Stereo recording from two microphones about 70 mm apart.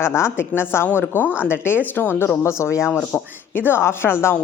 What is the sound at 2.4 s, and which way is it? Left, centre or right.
Speech, left.